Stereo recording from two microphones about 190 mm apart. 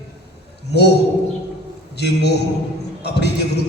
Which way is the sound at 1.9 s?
60° left (ahead or behind).